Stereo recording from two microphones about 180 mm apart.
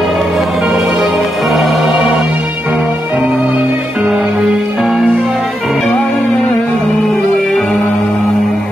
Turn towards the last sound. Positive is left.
turn(degrees=0)  # may be behind; listen again after turning